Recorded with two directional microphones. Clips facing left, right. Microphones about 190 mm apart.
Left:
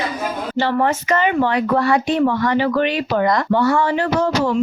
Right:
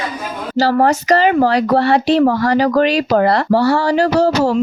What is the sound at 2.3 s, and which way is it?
Speech, 35° right (ahead or behind).